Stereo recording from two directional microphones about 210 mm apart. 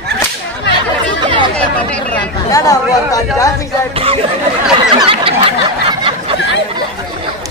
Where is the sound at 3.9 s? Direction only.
25° right (ahead or behind).